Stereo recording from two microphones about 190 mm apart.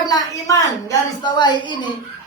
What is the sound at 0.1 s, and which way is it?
A woman's voice, 15° left (ahead or behind).